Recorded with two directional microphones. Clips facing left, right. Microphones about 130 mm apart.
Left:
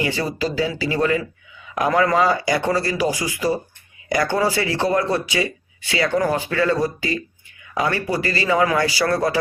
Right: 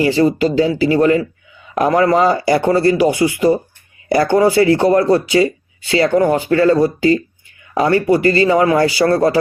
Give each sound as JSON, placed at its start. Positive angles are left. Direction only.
{"t": 0.0, "sound": "a man's voice", "side_deg": -30}